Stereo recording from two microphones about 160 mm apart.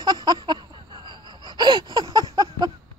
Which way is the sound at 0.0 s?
25° right (ahead or behind).